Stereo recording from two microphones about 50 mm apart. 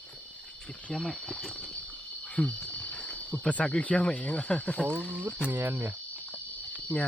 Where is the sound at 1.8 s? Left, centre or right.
Left.